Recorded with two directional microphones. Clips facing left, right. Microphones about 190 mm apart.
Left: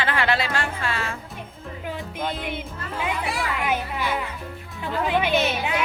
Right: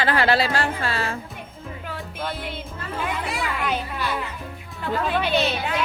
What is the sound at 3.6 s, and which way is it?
Speech, 15° left (ahead or behind).